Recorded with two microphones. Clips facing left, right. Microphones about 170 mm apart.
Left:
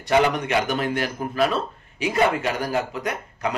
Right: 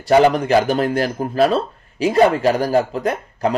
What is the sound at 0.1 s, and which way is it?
Speech, 35° right (ahead or behind).